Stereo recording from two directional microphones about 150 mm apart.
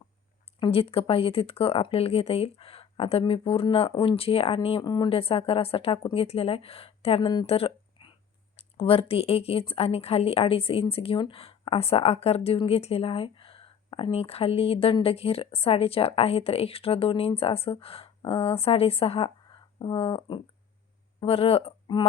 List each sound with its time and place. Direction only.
0.6 s speech: 40° left (ahead or behind)
7.4 s a sound: 40° left (ahead or behind)
8.5 s speech: 40° left (ahead or behind)